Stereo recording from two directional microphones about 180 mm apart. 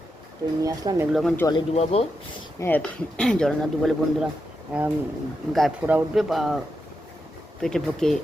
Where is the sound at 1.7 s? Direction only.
35° left (ahead or behind).